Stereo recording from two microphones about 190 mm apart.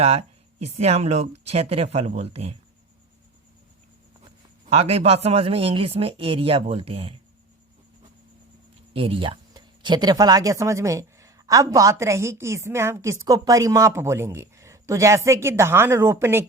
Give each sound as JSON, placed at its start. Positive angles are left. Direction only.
{"t": 0.0, "sound": "speech", "side_deg": -35}
{"t": 4.6, "sound": "speech", "side_deg": -35}
{"t": 8.9, "sound": "speech", "side_deg": -30}